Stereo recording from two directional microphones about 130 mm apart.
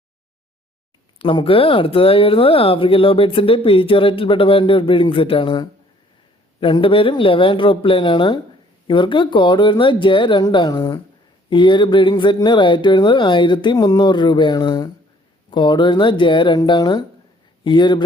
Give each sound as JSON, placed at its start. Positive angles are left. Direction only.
{"t": 1.2, "sound": "speech", "side_deg": 45}